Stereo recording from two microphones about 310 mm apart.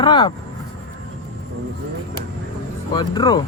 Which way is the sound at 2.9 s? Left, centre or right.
Centre.